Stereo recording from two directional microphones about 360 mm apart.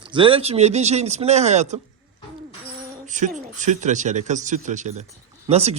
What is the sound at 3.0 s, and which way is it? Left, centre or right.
Speech, centre.